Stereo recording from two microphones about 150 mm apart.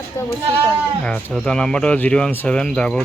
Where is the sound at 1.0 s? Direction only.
5° left (ahead or behind).